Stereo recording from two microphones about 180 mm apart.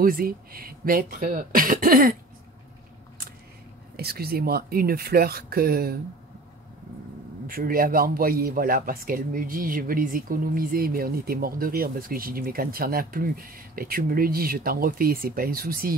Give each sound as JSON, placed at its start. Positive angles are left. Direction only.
{"t": 0.0, "sound": "a man's voice", "side_deg": -55}
{"t": 3.9, "sound": "speech", "side_deg": -60}
{"t": 7.4, "sound": "a man's voice", "side_deg": -50}